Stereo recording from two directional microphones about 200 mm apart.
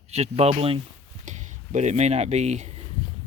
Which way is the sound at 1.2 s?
35° right (ahead or behind).